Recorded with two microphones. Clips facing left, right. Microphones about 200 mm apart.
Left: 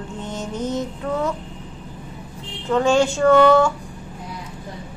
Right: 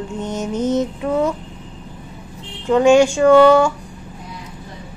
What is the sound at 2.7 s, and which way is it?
Speech, 15° right (ahead or behind).